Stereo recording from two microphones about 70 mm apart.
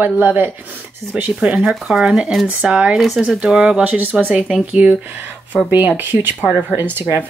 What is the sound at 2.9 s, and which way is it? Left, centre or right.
Speech, centre.